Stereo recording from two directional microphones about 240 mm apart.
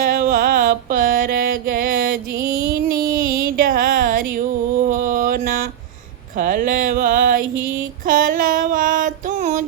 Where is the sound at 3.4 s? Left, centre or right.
Right.